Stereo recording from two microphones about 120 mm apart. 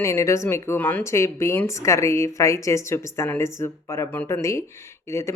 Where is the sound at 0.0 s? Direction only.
25° left (ahead or behind).